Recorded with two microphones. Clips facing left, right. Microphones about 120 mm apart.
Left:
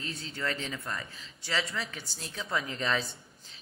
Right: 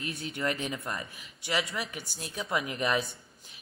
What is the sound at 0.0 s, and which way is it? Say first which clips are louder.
Speech: right 3 dB; 65° right (ahead or behind).